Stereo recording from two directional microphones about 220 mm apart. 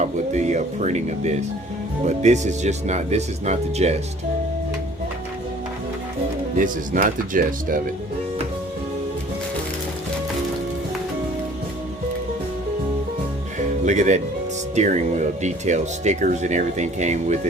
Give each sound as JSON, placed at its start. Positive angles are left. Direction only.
{"t": 0.0, "sound": "speech", "side_deg": -30}
{"t": 6.6, "sound": "speech", "side_deg": -40}
{"t": 13.8, "sound": "speech", "side_deg": -30}